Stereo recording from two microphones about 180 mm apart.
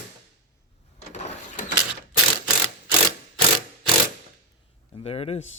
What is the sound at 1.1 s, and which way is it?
Vehicle, 40° left (ahead or behind).